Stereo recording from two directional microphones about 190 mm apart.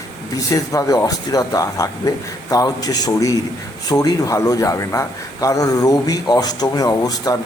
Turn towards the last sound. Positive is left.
turn(degrees=20)  # may be behind; listen again after turning